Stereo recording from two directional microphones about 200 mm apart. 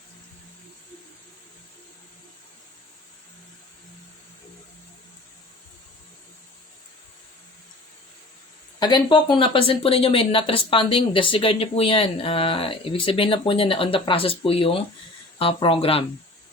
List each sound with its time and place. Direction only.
8.8 s speech: 20° left (ahead or behind)